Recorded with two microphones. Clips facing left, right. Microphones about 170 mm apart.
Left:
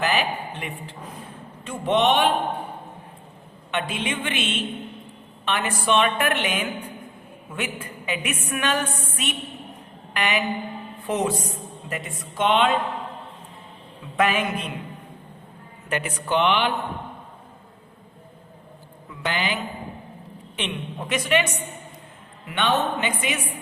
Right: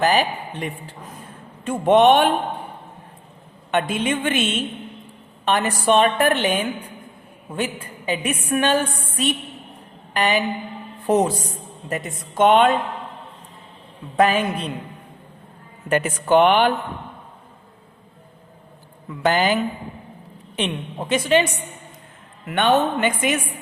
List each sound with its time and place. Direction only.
0.0 s a woman's voice: 40° right (ahead or behind)
1.6 s a woman's voice: 50° right (ahead or behind)
3.7 s a woman's voice: 45° right (ahead or behind)
14.2 s a woman's voice: 35° right (ahead or behind)
15.9 s a woman's voice: 45° right (ahead or behind)
19.2 s a woman's voice: 45° right (ahead or behind)
20.6 s a woman's voice: 30° right (ahead or behind)
22.4 s a woman's voice: 50° right (ahead or behind)